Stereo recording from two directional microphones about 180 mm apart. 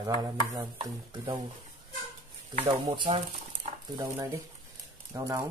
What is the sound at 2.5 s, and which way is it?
Speech, 30° right (ahead or behind).